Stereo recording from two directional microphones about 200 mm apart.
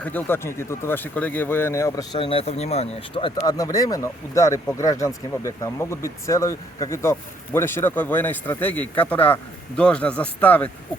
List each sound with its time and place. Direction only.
0.0 s speech: 10° left (ahead or behind)
2.1 s speech: 30° left (ahead or behind); by 10.7 s 5° left (ahead or behind)